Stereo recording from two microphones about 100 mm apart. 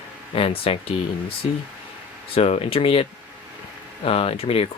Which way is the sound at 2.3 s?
75° left (ahead or behind).